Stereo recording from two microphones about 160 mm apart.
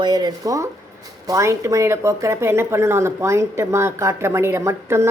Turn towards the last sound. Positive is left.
turn(degrees=-15)  # may be behind; listen again after turning